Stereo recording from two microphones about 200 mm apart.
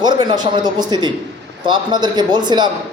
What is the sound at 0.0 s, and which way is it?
A man's voice, 20° right (ahead or behind).